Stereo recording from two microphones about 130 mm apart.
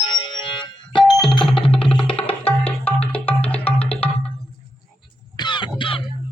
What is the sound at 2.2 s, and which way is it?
Tabla, 45° left (ahead or behind).